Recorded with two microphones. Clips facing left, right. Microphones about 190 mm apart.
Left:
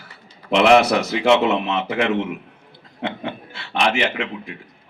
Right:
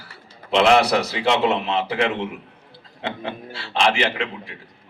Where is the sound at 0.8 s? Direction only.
35° right (ahead or behind).